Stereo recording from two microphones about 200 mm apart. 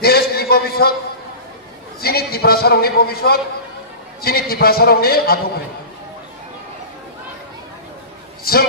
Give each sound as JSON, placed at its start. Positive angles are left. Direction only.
{"t": 0.0, "sound": "a sound", "side_deg": 50}
{"t": 2.0, "sound": "a man's voice", "side_deg": 50}
{"t": 8.5, "sound": "a man's voice", "side_deg": 50}